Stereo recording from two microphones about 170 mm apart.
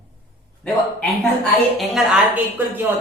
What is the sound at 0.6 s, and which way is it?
A man's voice, 5° left (ahead or behind).